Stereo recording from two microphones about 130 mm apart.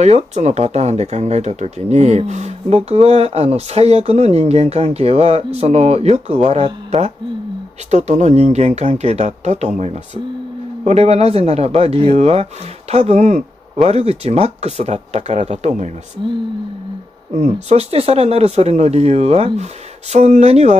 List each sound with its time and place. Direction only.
0.0 s speech: 60° right (ahead or behind)
17.3 s speech: 60° right (ahead or behind)